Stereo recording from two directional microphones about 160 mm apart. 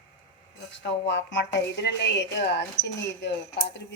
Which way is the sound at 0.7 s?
90° left.